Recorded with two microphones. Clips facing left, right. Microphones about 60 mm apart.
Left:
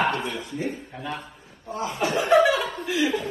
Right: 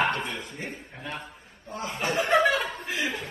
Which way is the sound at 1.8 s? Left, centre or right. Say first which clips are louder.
Left 3 dB; right.